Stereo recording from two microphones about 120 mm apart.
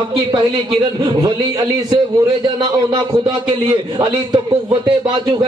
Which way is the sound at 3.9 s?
35° right (ahead or behind).